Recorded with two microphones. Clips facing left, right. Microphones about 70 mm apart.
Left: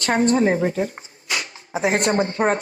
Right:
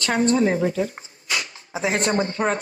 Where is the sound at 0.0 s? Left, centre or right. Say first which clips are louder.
Left 2 dB; left.